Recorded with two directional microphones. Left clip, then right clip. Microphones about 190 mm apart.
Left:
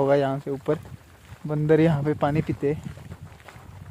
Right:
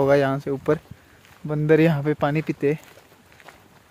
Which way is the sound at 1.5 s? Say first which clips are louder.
Right 2 dB; 5° right (ahead or behind).